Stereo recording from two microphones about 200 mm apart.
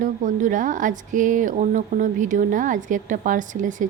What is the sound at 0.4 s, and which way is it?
Speech, 40° right (ahead or behind).